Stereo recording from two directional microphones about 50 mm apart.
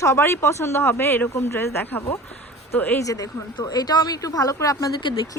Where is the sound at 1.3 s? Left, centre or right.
Left.